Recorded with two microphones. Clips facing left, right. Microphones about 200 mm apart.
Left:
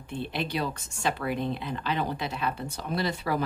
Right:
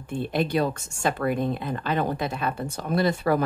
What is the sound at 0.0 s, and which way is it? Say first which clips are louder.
Speech: right 6 dB; 45° right (ahead or behind).